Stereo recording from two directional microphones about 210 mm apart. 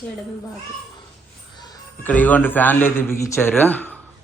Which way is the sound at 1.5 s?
20° left (ahead or behind).